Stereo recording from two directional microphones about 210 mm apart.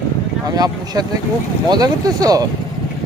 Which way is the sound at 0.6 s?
20° right (ahead or behind).